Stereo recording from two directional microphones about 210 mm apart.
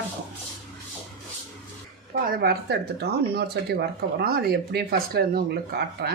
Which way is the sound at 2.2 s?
50° right (ahead or behind).